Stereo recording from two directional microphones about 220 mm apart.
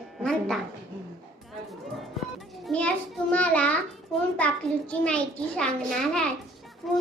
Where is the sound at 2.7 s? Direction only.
5° left (ahead or behind).